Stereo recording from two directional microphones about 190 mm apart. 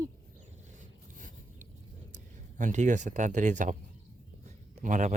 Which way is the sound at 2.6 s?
40° right (ahead or behind).